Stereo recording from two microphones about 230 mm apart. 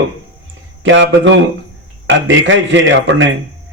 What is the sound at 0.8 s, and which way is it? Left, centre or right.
Speech, right.